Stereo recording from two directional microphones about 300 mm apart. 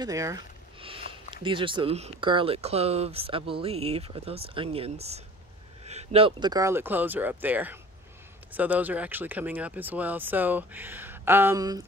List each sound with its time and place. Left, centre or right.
0.0 s speech: centre